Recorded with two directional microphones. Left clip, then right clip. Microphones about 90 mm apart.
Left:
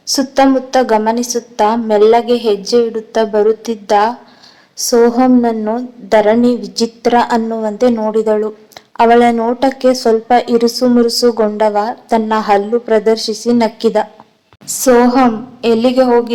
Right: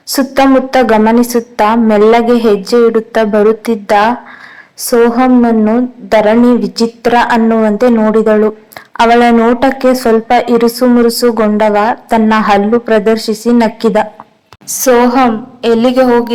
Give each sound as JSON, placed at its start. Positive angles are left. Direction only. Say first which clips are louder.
{"t": 0.1, "sound": "a woman's voice", "louder": "right 3 dB", "side_deg": -20}